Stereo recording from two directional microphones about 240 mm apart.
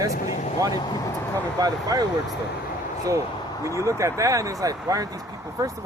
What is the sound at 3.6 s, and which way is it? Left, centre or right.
Speech, centre.